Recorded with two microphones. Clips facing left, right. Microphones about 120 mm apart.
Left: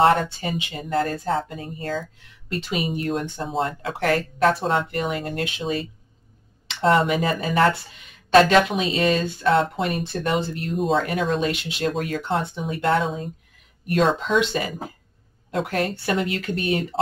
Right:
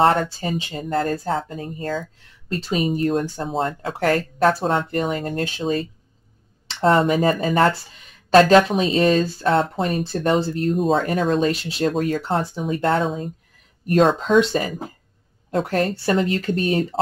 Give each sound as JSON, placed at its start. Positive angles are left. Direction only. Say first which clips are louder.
{"t": 0.0, "sound": "speech", "louder": "even", "side_deg": -40}